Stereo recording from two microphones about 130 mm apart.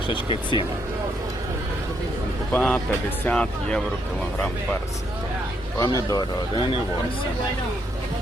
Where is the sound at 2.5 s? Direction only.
10° left (ahead or behind).